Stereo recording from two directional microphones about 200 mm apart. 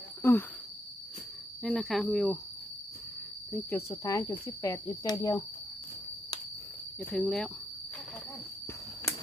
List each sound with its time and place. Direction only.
0.2 s speech: 10° left (ahead or behind)
1.6 s speech: centre (ahead or behind)
3.7 s speech: 15° left (ahead or behind)
7.1 s speech: 5° left (ahead or behind)